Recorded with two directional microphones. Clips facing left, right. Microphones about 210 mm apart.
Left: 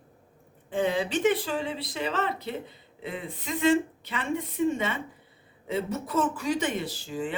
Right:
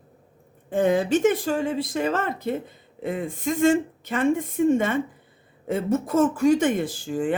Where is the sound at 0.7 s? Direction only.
45° right (ahead or behind).